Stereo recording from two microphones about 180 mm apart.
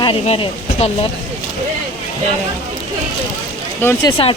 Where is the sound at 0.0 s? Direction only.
30° left (ahead or behind).